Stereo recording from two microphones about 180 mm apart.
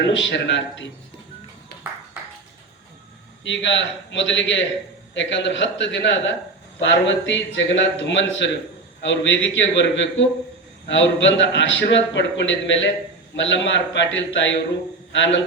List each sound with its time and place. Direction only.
0.0 s a man's voice: 85° left
3.5 s a man's voice: 85° left